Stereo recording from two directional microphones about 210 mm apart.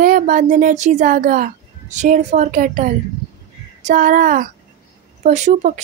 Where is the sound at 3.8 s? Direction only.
40° right (ahead or behind).